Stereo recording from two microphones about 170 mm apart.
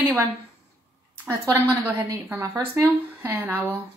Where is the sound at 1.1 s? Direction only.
15° right (ahead or behind).